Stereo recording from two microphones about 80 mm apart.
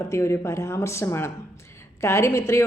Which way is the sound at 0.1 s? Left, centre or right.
Left.